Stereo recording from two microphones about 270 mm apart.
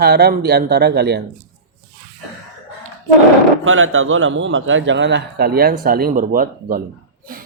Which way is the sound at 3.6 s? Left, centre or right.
Right.